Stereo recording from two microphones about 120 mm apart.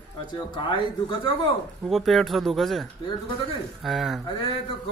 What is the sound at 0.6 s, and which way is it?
Speech, 45° left (ahead or behind).